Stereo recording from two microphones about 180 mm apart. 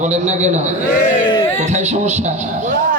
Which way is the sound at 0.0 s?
40° right (ahead or behind).